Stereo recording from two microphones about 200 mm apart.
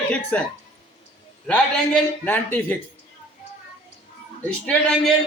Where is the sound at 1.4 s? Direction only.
5° left (ahead or behind).